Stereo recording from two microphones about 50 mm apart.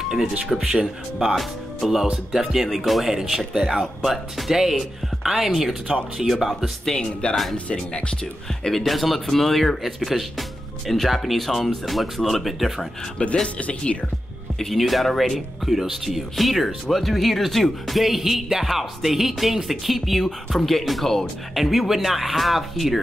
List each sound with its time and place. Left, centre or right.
0.5 s speech: centre
6.9 s speech: centre
8.6 s speech: centre
13.2 s speech: left
14.6 s speech: centre
21.5 s speech: centre